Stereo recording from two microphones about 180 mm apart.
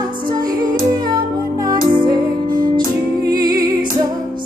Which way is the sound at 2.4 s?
50° right (ahead or behind).